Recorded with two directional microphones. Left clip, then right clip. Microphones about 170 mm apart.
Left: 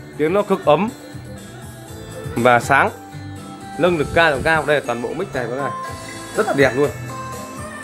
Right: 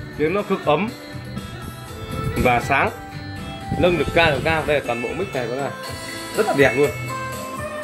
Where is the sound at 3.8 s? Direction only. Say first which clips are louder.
Left 2 dB; 5° left (ahead or behind).